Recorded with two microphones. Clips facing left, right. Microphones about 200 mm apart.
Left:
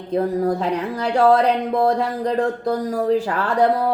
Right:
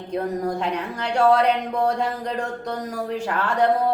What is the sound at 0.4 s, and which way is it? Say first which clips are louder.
Speech: left 4 dB; 35° left (ahead or behind).